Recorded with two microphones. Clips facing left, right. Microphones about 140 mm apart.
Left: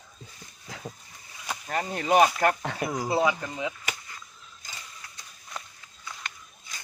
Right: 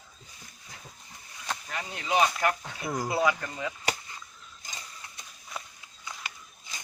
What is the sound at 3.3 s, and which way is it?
Speech, 15° left (ahead or behind).